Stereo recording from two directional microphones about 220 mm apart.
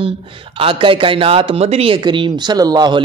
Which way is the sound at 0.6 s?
25° right (ahead or behind).